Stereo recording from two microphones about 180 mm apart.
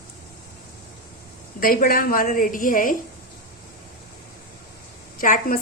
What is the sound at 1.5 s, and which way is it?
A woman's voice, 55° left (ahead or behind).